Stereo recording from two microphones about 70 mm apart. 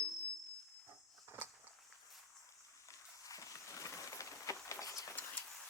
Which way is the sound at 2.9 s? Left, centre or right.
Left.